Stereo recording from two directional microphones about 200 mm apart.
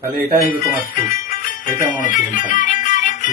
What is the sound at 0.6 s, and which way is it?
Music, 45° left (ahead or behind).